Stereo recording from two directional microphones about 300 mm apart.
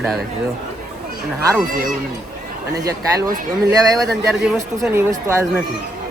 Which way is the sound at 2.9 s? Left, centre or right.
Centre.